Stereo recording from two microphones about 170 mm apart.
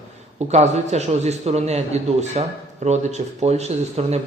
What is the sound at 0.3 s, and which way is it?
A man's voice, 40° right (ahead or behind).